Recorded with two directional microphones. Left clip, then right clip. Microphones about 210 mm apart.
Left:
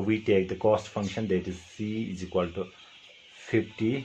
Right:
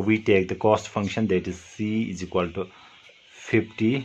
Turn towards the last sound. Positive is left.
turn(degrees=-30)  # may be behind; listen again after turning